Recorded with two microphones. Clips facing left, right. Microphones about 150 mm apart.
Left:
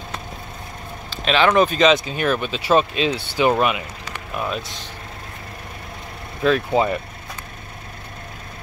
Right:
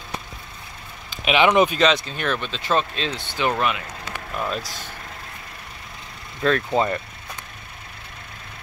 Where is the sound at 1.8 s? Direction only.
5° left (ahead or behind).